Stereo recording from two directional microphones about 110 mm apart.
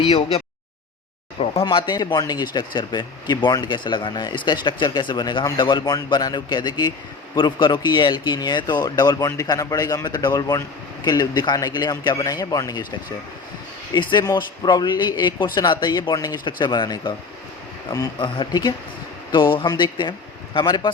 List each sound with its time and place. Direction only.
0.0 s a sound: 65° left (ahead or behind)
1.6 s a man's voice: 45° left (ahead or behind)
13.9 s a man's voice: 45° left (ahead or behind)
18.2 s a man's voice: 45° left (ahead or behind)